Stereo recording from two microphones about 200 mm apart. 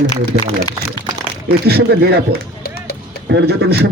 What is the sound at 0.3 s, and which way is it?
Speech, 50° right (ahead or behind).